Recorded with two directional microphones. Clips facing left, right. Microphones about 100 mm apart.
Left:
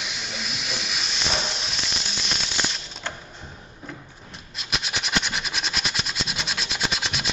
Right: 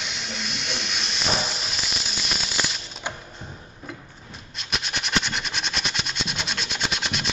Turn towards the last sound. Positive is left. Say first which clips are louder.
# even
turn(degrees=0)  # may be behind; listen again after turning